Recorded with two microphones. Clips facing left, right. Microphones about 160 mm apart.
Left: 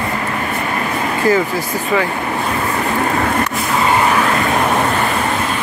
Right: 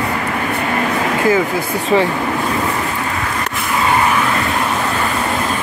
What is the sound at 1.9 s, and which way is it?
Speech, 25° right (ahead or behind).